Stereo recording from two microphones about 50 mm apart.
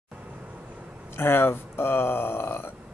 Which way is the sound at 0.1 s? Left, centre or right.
Right.